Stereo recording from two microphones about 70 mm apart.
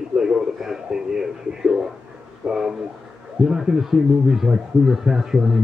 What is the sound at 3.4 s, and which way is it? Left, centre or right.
Speech, centre.